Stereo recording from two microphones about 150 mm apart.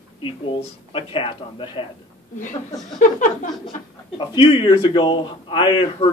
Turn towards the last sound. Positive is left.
turn(degrees=35)  # may be behind; listen again after turning